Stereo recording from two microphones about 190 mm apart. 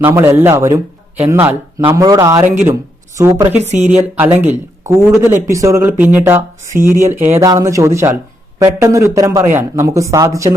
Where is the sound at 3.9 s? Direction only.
10° right (ahead or behind).